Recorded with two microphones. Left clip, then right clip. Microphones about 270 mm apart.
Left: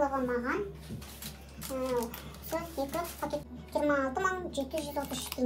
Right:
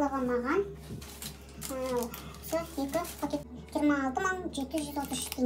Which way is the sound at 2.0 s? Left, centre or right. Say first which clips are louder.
Even; centre.